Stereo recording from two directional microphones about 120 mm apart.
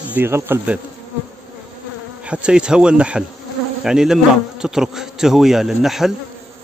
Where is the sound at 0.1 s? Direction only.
20° right (ahead or behind).